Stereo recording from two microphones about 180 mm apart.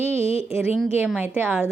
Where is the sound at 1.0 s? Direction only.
5° right (ahead or behind).